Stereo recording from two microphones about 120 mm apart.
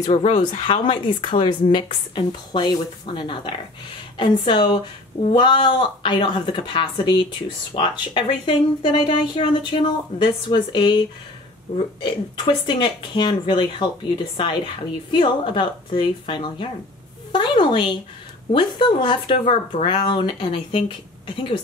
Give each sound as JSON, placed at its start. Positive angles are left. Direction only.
{"t": 0.0, "sound": "speech", "side_deg": 60}
{"t": 0.4, "sound": "speech", "side_deg": 45}
{"t": 12.0, "sound": "a woman's voice", "side_deg": 40}